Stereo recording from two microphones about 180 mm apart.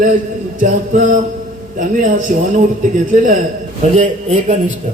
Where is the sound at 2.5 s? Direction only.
45° right (ahead or behind).